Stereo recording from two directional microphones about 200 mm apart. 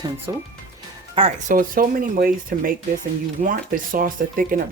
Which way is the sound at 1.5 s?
45° right (ahead or behind).